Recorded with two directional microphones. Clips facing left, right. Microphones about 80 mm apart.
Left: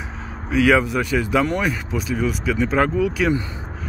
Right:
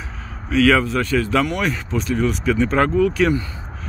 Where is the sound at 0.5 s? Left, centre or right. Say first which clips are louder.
Right 1 dB; centre.